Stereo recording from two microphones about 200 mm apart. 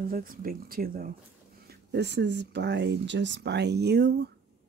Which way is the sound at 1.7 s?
55° right (ahead or behind).